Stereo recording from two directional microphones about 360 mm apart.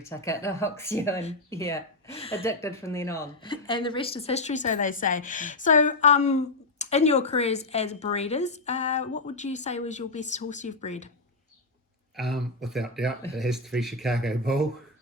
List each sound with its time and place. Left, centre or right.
0.0 s speech: centre
12.1 s speech: centre